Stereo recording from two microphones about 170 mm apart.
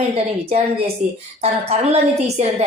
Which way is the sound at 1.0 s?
45° right (ahead or behind).